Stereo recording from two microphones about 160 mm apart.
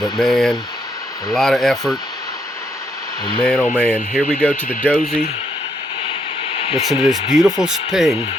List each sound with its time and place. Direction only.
0.0 s speech: centre (ahead or behind)
3.4 s speech: 5° left (ahead or behind)
6.5 s a sound: 35° left (ahead or behind)
6.7 s speech: centre (ahead or behind)